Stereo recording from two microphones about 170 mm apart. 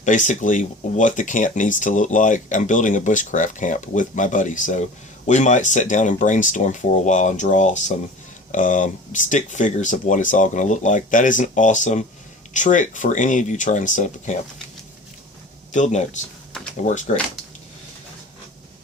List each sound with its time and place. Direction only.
0.0 s speech: 45° left (ahead or behind)
15.7 s speech: 45° left (ahead or behind)